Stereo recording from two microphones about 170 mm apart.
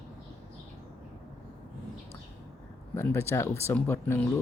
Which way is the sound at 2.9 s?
15° left (ahead or behind).